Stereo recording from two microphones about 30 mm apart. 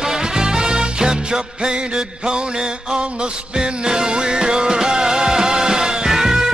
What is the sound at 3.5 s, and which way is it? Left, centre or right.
Music, right.